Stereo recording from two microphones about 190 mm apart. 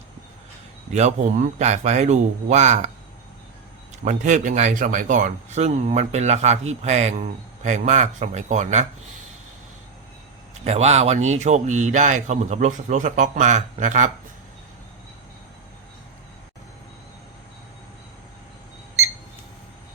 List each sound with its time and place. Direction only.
0.9 s speech: 35° right (ahead or behind)
4.0 s speech: 40° right (ahead or behind)
10.5 s speech: 35° right (ahead or behind)